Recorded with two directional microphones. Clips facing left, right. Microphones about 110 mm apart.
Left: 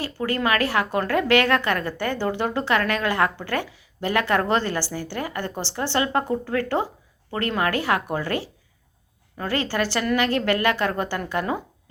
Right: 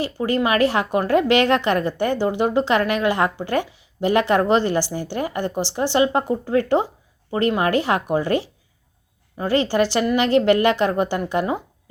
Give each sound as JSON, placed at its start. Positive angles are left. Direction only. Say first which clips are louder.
{"t": 0.0, "sound": "a woman's voice", "louder": "right 4 dB", "side_deg": -20}